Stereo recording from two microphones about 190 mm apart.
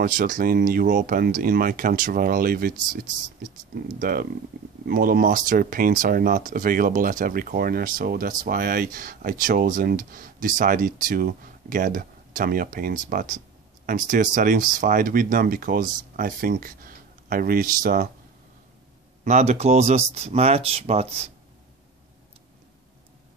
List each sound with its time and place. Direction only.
0.0 s speech: 45° right (ahead or behind)
19.2 s speech: 35° right (ahead or behind)